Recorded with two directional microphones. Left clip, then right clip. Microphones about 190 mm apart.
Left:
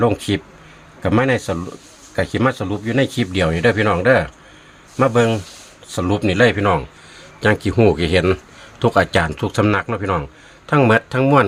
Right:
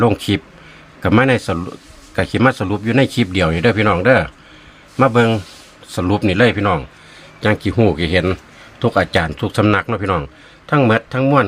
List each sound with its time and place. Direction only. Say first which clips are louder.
0.0 s a man's voice: right 2 dB; 20° right (ahead or behind)
10.7 s speech: even; centre (ahead or behind)